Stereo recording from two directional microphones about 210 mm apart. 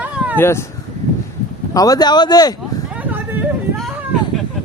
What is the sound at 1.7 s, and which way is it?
Speech, 15° left (ahead or behind).